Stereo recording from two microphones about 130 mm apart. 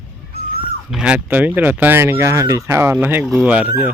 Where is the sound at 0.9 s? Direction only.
5° right (ahead or behind).